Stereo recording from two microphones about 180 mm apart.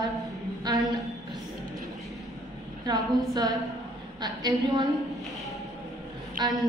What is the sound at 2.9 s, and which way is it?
A woman's voice, 20° right (ahead or behind).